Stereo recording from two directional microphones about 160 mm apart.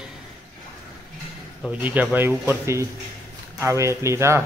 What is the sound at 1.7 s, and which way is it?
Speech, 10° right (ahead or behind).